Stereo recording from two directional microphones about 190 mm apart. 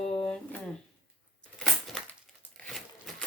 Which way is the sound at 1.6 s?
5° left (ahead or behind).